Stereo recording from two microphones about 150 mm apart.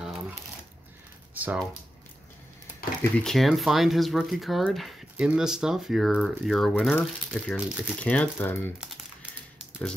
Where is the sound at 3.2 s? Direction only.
Centre (ahead or behind).